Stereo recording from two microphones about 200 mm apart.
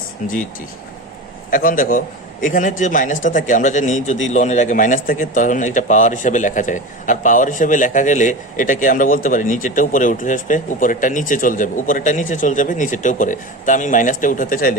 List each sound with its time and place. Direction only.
1.5 s a man's voice: 45° left (ahead or behind)